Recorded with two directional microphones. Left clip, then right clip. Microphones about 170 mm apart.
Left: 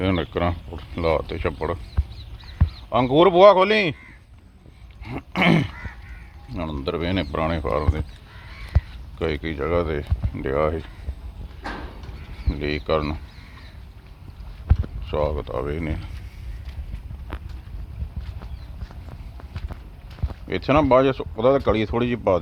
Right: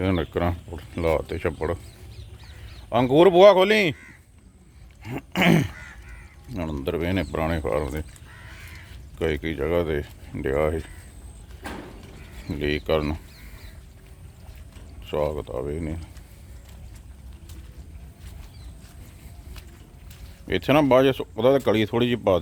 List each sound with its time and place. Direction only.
0.0 s speech: 10° right (ahead or behind)
2.9 s speech: 30° right (ahead or behind)
5.0 s speech: 25° right (ahead or behind)
9.1 s speech: 20° right (ahead or behind)
12.5 s speech: 25° right (ahead or behind)
15.0 s speech: 10° right (ahead or behind)
20.5 s speech: 25° right (ahead or behind)